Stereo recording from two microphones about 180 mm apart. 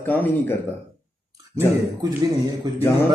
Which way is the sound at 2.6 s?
25° right (ahead or behind).